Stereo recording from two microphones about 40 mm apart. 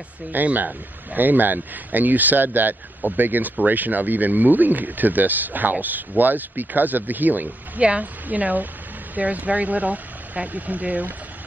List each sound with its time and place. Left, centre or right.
0.3 s speech: right